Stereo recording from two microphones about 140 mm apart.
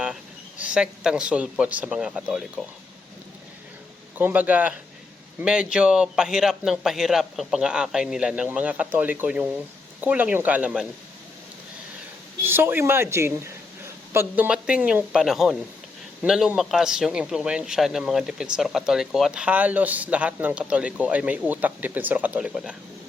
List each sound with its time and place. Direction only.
0.6 s speech: 5° right (ahead or behind)
4.2 s a man's voice: 10° right (ahead or behind)
12.4 s a man's voice: 15° right (ahead or behind)